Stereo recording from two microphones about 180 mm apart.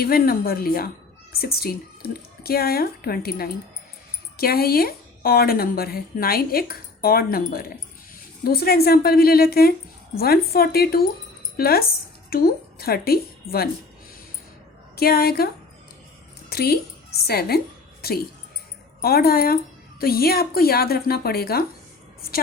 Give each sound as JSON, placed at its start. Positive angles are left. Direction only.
{"t": 0.0, "sound": "a woman's voice", "side_deg": 55}
{"t": 14.9, "sound": "a woman's voice", "side_deg": 60}
{"t": 16.5, "sound": "a woman's voice", "side_deg": 60}
{"t": 19.0, "sound": "a woman's voice", "side_deg": 60}